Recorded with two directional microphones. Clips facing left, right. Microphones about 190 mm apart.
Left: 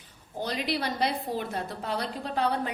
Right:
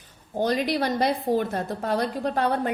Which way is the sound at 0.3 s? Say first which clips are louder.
Right 7 dB; 45° right (ahead or behind).